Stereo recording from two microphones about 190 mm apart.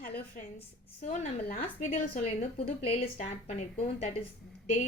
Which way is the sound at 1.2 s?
50° left (ahead or behind).